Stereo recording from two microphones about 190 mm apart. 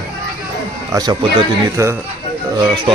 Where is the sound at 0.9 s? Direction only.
20° right (ahead or behind).